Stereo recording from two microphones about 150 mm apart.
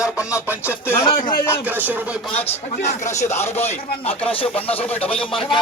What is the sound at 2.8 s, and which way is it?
Speech, 50° left (ahead or behind).